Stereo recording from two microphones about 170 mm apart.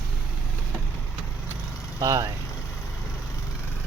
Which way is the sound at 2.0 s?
20° right (ahead or behind).